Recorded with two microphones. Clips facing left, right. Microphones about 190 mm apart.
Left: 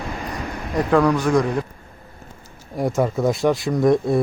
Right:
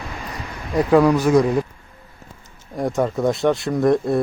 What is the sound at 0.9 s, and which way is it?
Speech, 5° right (ahead or behind).